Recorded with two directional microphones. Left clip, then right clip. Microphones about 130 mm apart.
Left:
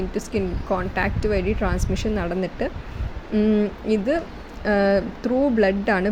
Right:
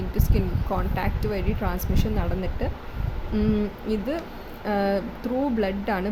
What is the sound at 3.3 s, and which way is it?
Speech, 20° left (ahead or behind).